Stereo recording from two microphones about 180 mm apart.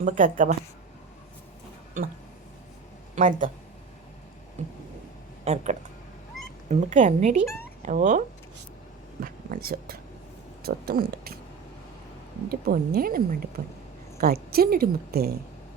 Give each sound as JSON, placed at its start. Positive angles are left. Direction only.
{"t": 0.0, "sound": "speech", "side_deg": -45}
{"t": 3.2, "sound": "speech", "side_deg": -45}
{"t": 4.6, "sound": "speech", "side_deg": -40}
{"t": 6.7, "sound": "speech", "side_deg": -40}
{"t": 9.2, "sound": "a woman's voice", "side_deg": -55}
{"t": 12.5, "sound": "a woman's voice", "side_deg": -55}